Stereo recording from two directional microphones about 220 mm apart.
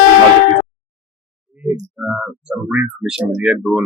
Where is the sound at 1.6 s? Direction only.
5° right (ahead or behind).